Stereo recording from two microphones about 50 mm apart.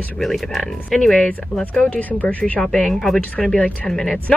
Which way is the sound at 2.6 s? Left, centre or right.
Centre.